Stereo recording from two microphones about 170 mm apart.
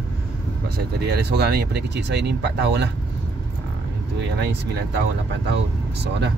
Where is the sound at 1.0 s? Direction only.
75° right (ahead or behind); by 2.9 s 90° right.